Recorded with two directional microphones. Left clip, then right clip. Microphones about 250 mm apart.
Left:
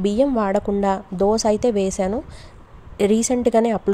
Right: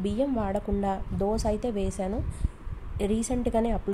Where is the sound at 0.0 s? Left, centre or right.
Left.